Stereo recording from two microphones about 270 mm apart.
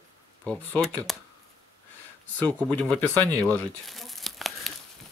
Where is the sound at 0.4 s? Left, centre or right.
Centre.